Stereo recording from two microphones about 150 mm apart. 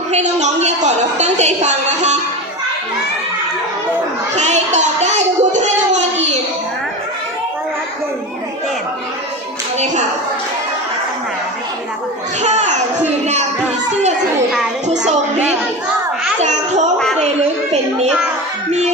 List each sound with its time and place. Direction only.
0.1 s a woman's voice: 50° right (ahead or behind)
4.4 s music: 50° right (ahead or behind)
12.4 s a child's voice: 50° right (ahead or behind)
14.8 s a sound: 50° right (ahead or behind)